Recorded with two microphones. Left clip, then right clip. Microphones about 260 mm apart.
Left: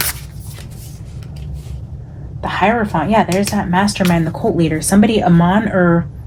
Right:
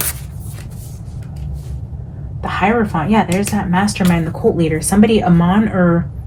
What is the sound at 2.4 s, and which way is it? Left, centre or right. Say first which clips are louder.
Speech: left 1 dB; left.